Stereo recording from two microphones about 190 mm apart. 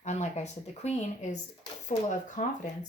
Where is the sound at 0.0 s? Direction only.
35° left (ahead or behind).